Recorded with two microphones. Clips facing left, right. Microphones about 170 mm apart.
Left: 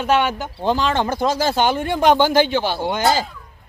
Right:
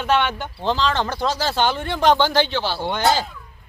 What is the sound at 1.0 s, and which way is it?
Speech, 50° left (ahead or behind).